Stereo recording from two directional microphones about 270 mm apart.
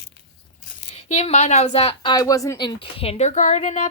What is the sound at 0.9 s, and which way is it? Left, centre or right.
Speech, left.